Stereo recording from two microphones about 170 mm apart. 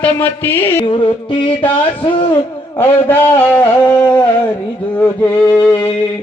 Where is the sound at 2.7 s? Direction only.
10° left (ahead or behind).